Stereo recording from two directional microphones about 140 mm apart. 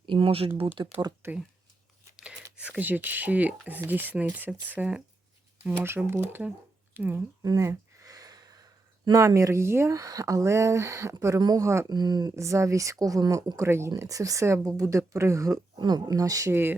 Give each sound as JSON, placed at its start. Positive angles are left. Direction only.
{"t": 0.0, "sound": "speech", "side_deg": -35}
{"t": 0.8, "sound": "speech", "side_deg": -30}
{"t": 1.2, "sound": "speech", "side_deg": -20}
{"t": 2.1, "sound": "speech", "side_deg": -5}
{"t": 7.4, "sound": "a sound", "side_deg": -20}
{"t": 9.0, "sound": "speech", "side_deg": -25}